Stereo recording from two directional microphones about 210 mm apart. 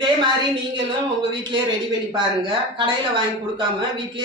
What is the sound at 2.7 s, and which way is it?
A woman's voice, 25° right (ahead or behind).